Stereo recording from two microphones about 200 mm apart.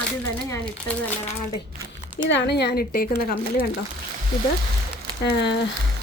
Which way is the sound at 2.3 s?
55° left (ahead or behind).